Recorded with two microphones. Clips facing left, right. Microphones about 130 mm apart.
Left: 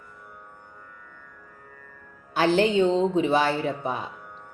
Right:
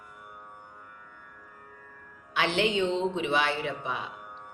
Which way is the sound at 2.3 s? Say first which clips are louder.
Left 6 dB; 40° left (ahead or behind).